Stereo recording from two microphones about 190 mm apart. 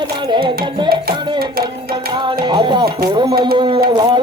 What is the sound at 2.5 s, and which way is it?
Music, 25° right (ahead or behind).